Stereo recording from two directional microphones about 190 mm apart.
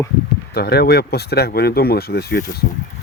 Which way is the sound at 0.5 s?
55° left (ahead or behind).